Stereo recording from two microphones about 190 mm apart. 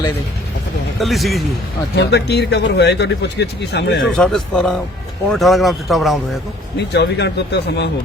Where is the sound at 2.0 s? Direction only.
60° left (ahead or behind).